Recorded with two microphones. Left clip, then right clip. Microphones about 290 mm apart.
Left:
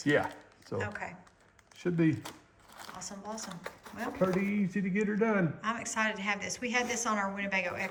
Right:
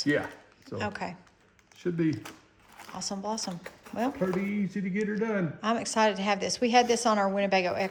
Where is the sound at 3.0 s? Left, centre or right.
Centre.